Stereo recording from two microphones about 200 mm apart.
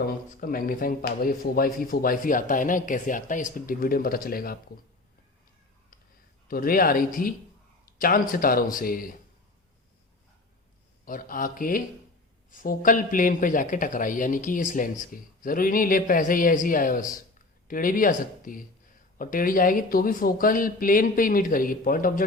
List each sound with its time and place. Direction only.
0.0 s a man's voice: 45° left (ahead or behind)
6.5 s a man's voice: 45° left (ahead or behind)
11.0 s a man's voice: 45° left (ahead or behind)